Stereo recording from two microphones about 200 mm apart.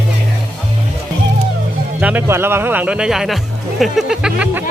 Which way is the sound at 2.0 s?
10° right (ahead or behind).